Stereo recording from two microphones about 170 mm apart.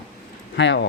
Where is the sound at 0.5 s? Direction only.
90° left.